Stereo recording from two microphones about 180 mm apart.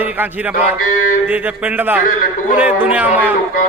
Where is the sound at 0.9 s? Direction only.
50° left (ahead or behind).